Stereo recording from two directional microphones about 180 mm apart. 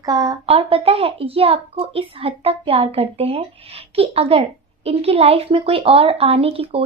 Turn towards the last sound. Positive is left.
turn(degrees=-30)  # may be behind; listen again after turning